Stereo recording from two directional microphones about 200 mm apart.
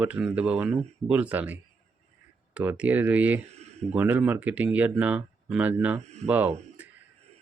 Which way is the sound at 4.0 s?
10° right (ahead or behind).